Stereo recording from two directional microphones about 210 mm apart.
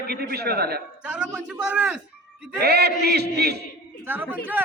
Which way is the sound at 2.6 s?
50° right (ahead or behind).